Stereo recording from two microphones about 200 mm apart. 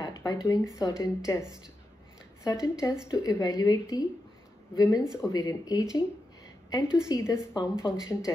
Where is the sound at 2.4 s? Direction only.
15° left (ahead or behind).